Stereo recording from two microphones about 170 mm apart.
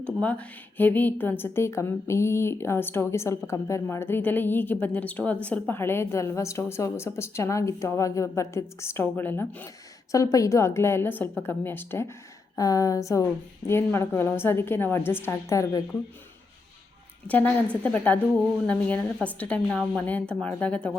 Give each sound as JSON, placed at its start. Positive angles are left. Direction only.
{"t": 0.0, "sound": "a woman's voice", "side_deg": 10}
{"t": 17.2, "sound": "a woman's voice", "side_deg": 10}